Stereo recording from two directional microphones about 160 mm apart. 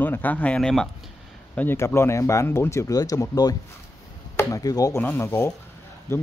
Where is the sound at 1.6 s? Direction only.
15° left (ahead or behind).